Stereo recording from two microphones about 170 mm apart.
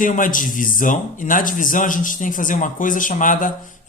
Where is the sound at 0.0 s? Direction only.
50° left (ahead or behind).